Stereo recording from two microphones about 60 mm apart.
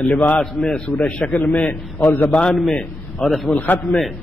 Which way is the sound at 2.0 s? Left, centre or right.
Left.